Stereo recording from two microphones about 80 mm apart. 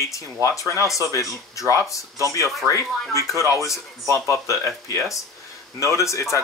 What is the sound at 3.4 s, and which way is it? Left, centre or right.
Speech, left.